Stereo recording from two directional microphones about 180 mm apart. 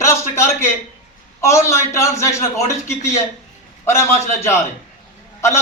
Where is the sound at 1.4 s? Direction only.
15° left (ahead or behind).